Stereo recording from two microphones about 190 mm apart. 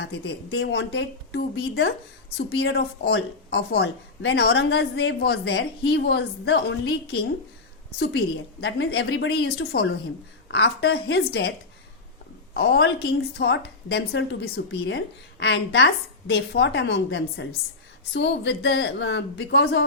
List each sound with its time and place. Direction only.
0.0 s a woman's voice: 65° left (ahead or behind)
7.9 s a woman's voice: 90° left
8.6 s a woman's voice: 65° left (ahead or behind)
12.5 s a woman's voice: 55° left (ahead or behind)